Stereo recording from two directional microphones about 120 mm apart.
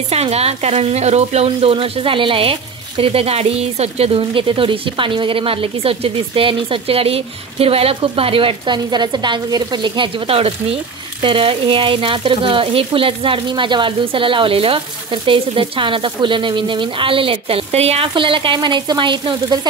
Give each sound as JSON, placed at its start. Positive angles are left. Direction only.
{"t": 0.1, "sound": "speech", "side_deg": -60}
{"t": 4.2, "sound": "a woman's voice", "side_deg": -45}
{"t": 18.0, "sound": "speech", "side_deg": -45}